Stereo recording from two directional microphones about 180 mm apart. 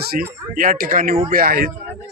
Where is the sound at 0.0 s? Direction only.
55° right (ahead or behind).